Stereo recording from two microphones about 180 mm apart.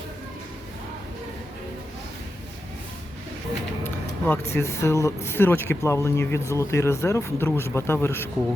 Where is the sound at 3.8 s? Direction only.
10° left (ahead or behind).